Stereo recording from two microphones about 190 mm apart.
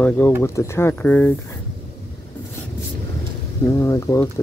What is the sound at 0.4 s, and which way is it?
Speech, 15° left (ahead or behind).